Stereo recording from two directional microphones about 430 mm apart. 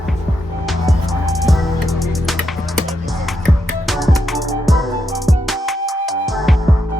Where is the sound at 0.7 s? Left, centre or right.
Centre.